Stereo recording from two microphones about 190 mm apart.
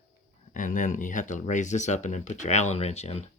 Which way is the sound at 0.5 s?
45° left (ahead or behind).